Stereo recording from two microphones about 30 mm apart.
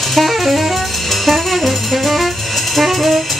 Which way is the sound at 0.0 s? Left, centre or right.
Centre.